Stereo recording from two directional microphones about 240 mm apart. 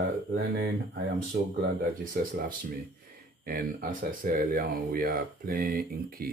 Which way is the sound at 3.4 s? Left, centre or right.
Right.